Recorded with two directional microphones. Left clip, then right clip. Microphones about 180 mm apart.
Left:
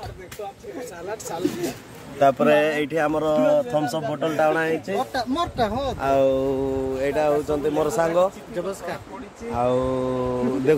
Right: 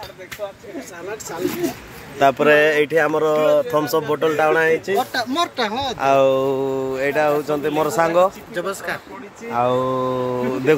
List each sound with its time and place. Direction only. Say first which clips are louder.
2.1 s speech: right 3 dB; 20° right (ahead or behind)
5.6 s speech: right 2 dB; 40° left (ahead or behind)
5.9 s speech: right 5 dB; 25° right (ahead or behind)
8.5 s speech: right 4 dB; 5° left (ahead or behind)
9.5 s speech: right 3 dB; 30° right (ahead or behind)